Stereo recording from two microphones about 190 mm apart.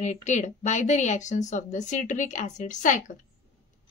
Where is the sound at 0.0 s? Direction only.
35° left (ahead or behind).